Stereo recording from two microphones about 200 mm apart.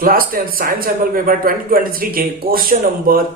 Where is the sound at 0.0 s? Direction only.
45° right (ahead or behind).